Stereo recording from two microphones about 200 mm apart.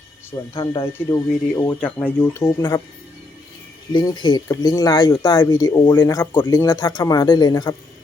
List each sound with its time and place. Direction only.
0.5 s speech: 25° left (ahead or behind)
3.9 s speech: 20° left (ahead or behind)